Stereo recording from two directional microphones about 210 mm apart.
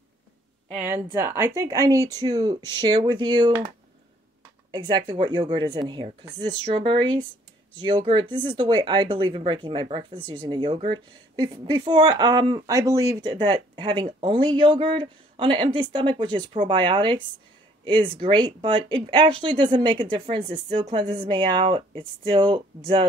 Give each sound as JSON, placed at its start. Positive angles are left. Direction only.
{"t": 0.7, "sound": "speech", "side_deg": -10}
{"t": 4.6, "sound": "speech", "side_deg": -20}
{"t": 10.1, "sound": "speech", "side_deg": 10}
{"t": 10.4, "sound": "speech", "side_deg": -20}